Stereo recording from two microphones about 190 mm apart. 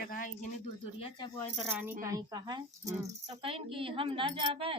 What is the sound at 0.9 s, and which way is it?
Speech, 30° left (ahead or behind).